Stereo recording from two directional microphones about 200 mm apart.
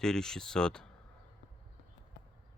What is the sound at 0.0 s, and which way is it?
Speech, 5° left (ahead or behind).